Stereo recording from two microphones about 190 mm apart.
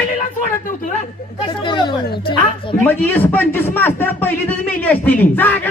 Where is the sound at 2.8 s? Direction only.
10° left (ahead or behind).